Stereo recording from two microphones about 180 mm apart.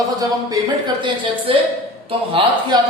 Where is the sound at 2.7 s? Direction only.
25° right (ahead or behind).